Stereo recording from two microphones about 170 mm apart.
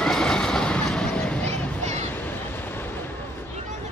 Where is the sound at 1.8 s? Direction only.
45° right (ahead or behind).